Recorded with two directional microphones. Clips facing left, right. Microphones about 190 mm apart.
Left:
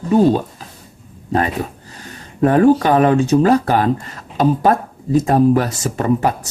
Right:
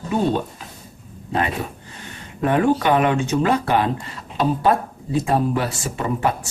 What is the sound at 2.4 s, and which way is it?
Speech, 40° left (ahead or behind).